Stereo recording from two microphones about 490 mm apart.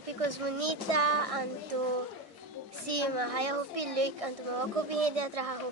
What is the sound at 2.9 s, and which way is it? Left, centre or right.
A child's voice, right.